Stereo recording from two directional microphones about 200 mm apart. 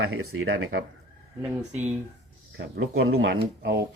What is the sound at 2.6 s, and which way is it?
Speech, 80° right.